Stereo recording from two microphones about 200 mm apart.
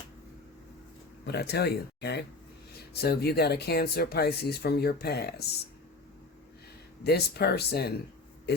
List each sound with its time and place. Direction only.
1.2 s speech: 55° left (ahead or behind)
7.0 s speech: 55° left (ahead or behind)